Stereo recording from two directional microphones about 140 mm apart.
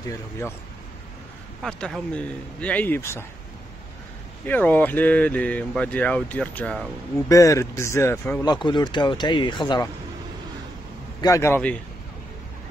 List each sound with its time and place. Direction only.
1.6 s speech: 5° left (ahead or behind); by 3.3 s 20° left (ahead or behind)
4.5 s speech: 10° left (ahead or behind)
7.2 s speech: 25° left (ahead or behind)
8.5 s speech: 35° left (ahead or behind)
11.1 s speech: 25° left (ahead or behind)